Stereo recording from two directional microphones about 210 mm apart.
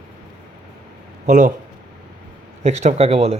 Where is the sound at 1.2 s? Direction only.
35° right (ahead or behind).